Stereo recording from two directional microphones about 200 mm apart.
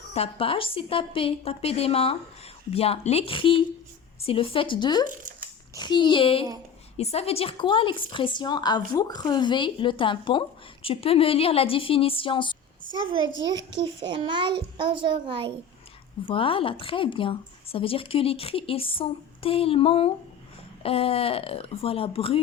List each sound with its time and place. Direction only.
0.1 s a woman's voice: 30° left (ahead or behind)
5.0 s speech: 40° right (ahead or behind)
5.7 s a woman's voice: 20° left (ahead or behind)
13.6 s a woman's voice: 65° right (ahead or behind)
14.1 s a child's voice: 25° right (ahead or behind)
16.2 s a woman's voice: 25° left (ahead or behind)